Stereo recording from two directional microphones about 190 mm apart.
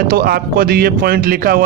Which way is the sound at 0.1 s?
50° right (ahead or behind).